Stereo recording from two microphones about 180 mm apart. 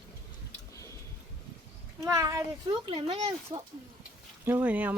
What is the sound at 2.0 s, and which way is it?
Speech, 15° right (ahead or behind).